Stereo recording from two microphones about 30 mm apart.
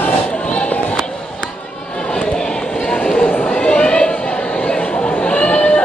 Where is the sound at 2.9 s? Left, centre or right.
Left.